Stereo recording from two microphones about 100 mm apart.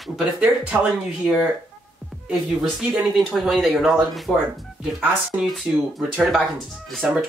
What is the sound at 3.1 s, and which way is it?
Speech, 5° right (ahead or behind).